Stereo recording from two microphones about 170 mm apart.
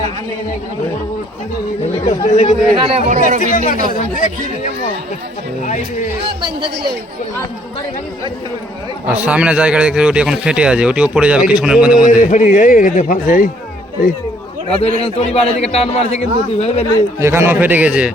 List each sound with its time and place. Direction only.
2.0 s a man's voice: 40° left (ahead or behind)
2.8 s speech: 40° right (ahead or behind)
3.5 s a man's voice: 50° left (ahead or behind)
6.4 s a man's voice: 25° right (ahead or behind)
9.0 s speech: 10° right (ahead or behind)
12.2 s a man's voice: 50° left (ahead or behind)
14.7 s a man's voice: 35° left (ahead or behind)
17.2 s speech: 15° right (ahead or behind)